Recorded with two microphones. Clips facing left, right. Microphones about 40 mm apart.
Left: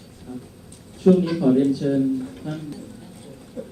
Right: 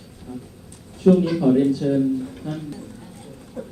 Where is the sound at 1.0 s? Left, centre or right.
Centre.